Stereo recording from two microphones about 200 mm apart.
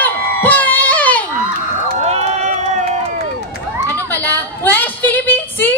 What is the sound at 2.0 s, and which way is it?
Run, 30° right (ahead or behind).